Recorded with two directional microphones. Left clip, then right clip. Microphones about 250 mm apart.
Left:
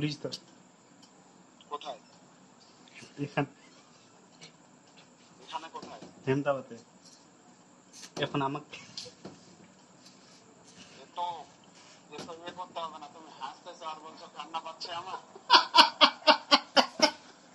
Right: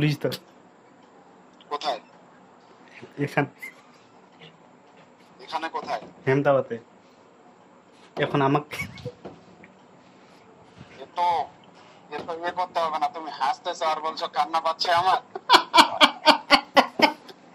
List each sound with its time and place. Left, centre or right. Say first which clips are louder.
0.0 s a man's voice: right 9 dB; right
1.7 s a sound: right 11 dB; right
5.5 s a man's voice: right 12 dB; right
8.2 s speech: right 10 dB; right
11.0 s a sound: right 13 dB; right
12.1 s speech: right 13 dB; right